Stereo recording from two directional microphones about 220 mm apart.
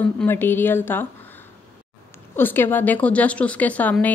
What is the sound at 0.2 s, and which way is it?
Speech, 10° left (ahead or behind).